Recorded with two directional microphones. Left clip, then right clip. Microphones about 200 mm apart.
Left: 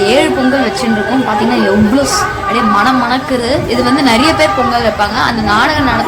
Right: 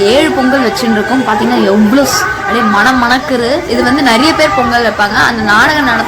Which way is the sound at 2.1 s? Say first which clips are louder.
Right 1 dB; 15° right (ahead or behind).